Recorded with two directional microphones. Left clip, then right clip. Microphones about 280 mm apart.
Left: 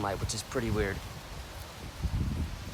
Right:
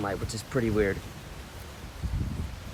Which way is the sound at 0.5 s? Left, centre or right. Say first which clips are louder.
Right 6 dB; left.